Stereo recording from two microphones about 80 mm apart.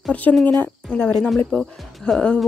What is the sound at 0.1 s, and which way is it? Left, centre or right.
Speech, centre.